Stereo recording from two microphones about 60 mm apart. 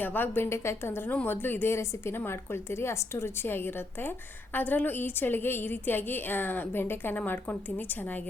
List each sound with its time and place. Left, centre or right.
0.0 s a woman's voice: left
0.5 s a woman's voice: left
1.2 s a woman's voice: left
4.5 s a woman's voice: left